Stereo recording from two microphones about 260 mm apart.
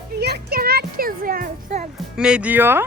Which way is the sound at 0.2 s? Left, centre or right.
Right.